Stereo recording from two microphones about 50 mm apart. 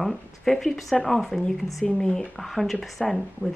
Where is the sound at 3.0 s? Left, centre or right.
Centre.